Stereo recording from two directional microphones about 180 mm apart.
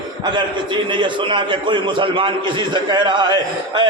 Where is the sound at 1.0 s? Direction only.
25° right (ahead or behind).